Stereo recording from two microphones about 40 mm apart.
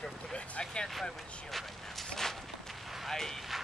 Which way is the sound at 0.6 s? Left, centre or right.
Centre.